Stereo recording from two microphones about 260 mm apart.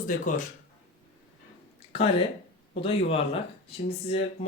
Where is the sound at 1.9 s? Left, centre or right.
Left.